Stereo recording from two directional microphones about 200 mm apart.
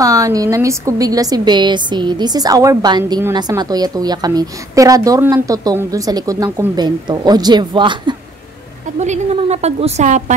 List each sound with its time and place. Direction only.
0.0 s a woman's voice: 15° right (ahead or behind)
9.0 s a woman's voice: 35° right (ahead or behind)